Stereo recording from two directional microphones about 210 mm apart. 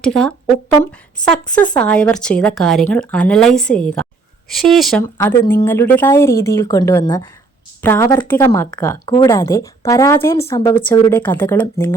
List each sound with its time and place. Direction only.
0.0 s speech: 5° left (ahead or behind)